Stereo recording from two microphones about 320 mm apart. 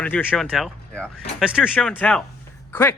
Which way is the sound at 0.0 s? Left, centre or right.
Centre.